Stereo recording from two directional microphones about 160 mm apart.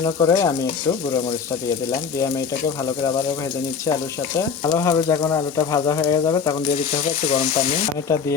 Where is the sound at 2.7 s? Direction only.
25° left (ahead or behind).